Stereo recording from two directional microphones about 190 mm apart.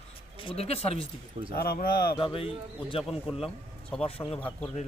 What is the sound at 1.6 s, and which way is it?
Speech, 50° left (ahead or behind).